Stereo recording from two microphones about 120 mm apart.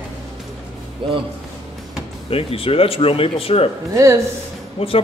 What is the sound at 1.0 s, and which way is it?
Speech, 45° right (ahead or behind).